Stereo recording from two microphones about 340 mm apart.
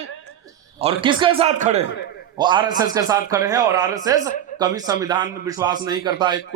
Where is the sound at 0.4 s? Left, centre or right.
Centre.